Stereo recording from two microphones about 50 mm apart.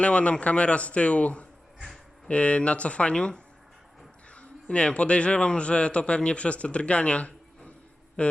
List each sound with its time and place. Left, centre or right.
0.0 s a man's voice: left